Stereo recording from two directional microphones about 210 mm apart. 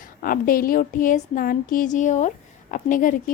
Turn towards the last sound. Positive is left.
turn(degrees=40)  # may be behind; listen again after turning